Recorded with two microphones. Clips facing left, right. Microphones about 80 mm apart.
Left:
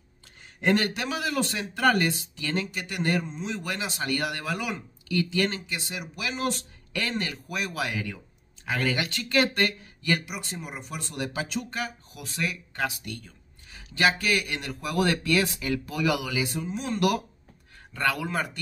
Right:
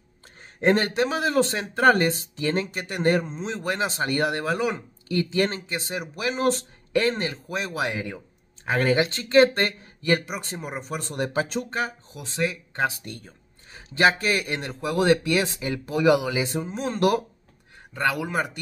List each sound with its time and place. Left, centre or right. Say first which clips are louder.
0.6 s speech: right 4 dB; right
17.9 s speech: right 3 dB; centre